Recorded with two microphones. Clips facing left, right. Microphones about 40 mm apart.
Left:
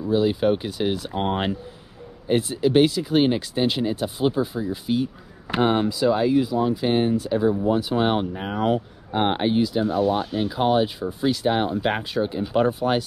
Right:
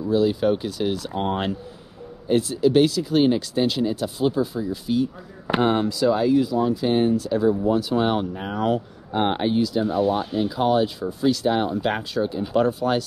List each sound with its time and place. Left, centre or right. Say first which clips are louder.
0.0 s speech: even; left
9.8 s speech: even; centre; by 13.0 s left